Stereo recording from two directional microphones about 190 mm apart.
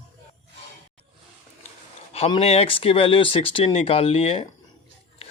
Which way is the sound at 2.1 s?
30° left (ahead or behind).